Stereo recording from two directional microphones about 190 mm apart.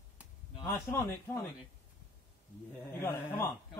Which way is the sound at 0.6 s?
15° left (ahead or behind).